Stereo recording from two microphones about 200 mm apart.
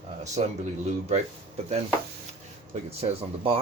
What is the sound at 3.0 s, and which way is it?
Speech, 30° right (ahead or behind).